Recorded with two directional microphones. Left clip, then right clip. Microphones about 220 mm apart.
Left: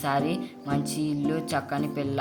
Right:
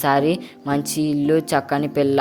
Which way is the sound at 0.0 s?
45° right (ahead or behind).